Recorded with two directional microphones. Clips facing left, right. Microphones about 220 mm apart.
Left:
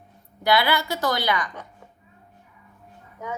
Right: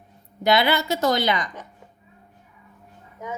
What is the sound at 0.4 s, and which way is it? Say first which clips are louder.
A woman's voice: right 2 dB; 20° right (ahead or behind).